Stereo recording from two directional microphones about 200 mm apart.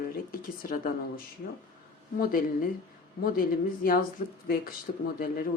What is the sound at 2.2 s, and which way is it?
Speech, 45° left (ahead or behind).